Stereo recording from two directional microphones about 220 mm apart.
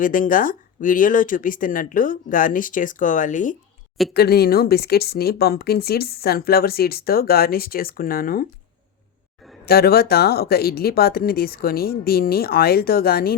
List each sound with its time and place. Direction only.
0.0 s speech: 40° left (ahead or behind)
9.6 s speech: 45° left (ahead or behind)